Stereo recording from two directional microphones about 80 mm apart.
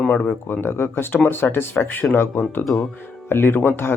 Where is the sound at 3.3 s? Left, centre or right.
Left.